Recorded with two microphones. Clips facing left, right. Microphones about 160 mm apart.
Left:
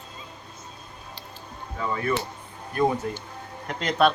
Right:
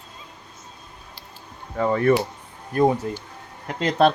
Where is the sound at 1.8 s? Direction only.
50° right (ahead or behind).